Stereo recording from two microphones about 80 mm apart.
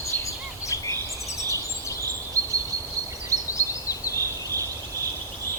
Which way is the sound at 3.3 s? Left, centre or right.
Right.